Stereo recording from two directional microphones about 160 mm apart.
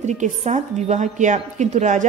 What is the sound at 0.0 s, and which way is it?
A woman's voice, 45° right (ahead or behind).